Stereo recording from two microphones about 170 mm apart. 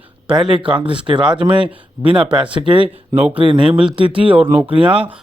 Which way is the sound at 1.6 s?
5° right (ahead or behind).